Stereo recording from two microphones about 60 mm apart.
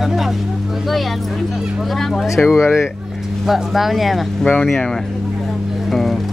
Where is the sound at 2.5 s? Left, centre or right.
Centre.